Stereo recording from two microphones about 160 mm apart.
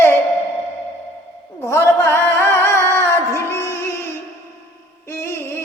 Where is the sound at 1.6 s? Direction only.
15° left (ahead or behind).